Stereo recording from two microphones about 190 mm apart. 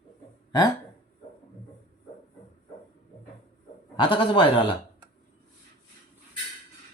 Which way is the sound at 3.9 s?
25° left (ahead or behind).